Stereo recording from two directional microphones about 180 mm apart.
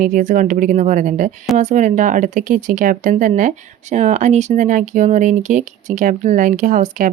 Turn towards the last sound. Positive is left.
turn(degrees=-45)  # may be behind; listen again after turning